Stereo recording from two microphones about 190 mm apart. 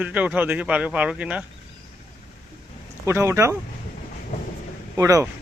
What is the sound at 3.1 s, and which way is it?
Speech, 15° right (ahead or behind).